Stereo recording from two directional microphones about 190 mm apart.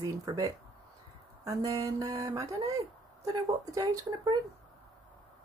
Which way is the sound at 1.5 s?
20° right (ahead or behind).